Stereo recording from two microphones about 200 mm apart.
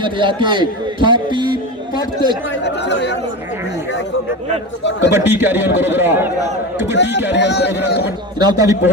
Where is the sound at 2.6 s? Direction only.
60° left (ahead or behind).